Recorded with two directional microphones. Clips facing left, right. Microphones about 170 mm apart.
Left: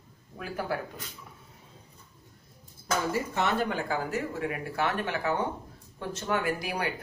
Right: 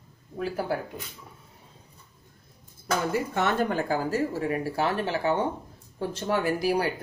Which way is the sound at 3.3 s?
45° right (ahead or behind).